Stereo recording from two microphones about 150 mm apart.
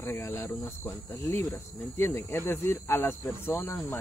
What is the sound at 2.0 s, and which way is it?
Speech, 20° left (ahead or behind).